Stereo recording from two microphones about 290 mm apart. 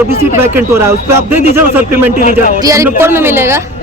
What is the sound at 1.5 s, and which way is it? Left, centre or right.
A woman's voice, centre.